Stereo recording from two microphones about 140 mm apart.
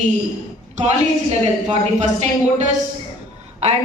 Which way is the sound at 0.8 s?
60° right (ahead or behind).